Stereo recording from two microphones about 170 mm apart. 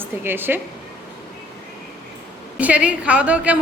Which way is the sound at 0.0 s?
10° right (ahead or behind).